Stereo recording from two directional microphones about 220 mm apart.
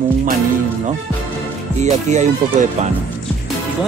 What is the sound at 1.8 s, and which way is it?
Music, 30° right (ahead or behind).